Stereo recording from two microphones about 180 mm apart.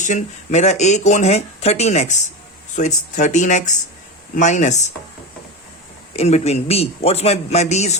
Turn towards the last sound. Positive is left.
turn(degrees=40)  # may be behind; listen again after turning